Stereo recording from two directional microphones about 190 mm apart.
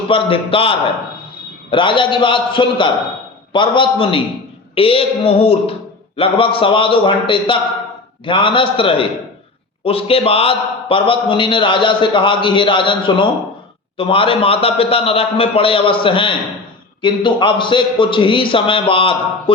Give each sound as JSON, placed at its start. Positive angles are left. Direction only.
{"t": 0.1, "sound": "a man's voice", "side_deg": 30}